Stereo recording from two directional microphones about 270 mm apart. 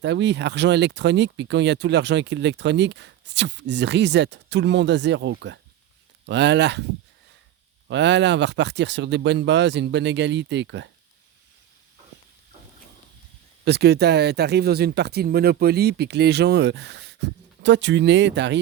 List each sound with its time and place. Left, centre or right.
0.0 s speech: right
7.9 s speech: right
13.7 s speech: right